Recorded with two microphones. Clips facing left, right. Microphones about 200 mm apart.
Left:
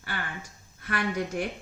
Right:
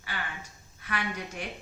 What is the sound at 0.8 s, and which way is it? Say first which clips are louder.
Speech: left 5 dB; 55° left (ahead or behind).